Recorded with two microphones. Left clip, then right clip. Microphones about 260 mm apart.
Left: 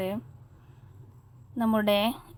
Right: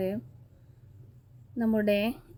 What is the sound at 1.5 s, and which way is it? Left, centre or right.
Speech, left.